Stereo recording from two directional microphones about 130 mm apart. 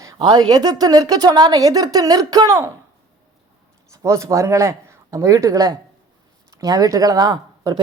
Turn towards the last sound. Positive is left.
turn(degrees=-30)  # may be behind; listen again after turning